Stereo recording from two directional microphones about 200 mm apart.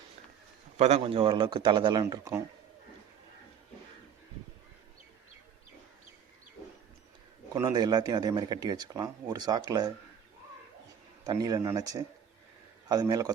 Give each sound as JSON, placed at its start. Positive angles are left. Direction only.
{"t": 0.8, "sound": "speech", "side_deg": -30}
{"t": 7.5, "sound": "speech", "side_deg": -20}
{"t": 11.3, "sound": "speech", "side_deg": -20}